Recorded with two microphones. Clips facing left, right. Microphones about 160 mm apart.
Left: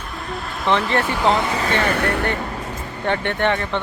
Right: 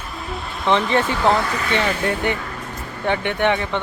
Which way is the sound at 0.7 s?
15° right (ahead or behind).